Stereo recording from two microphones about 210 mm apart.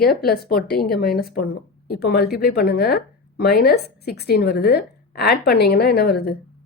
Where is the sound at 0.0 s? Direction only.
45° left (ahead or behind).